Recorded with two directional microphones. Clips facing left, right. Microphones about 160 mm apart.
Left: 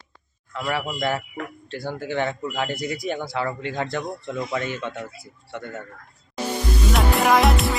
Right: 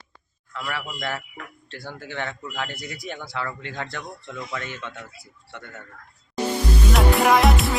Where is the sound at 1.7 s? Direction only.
15° left (ahead or behind).